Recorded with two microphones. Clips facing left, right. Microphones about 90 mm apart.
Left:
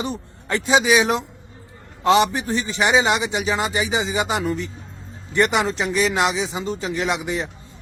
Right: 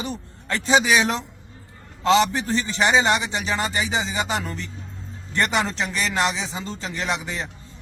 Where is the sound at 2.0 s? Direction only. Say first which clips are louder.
Left 2 dB; 20° left (ahead or behind).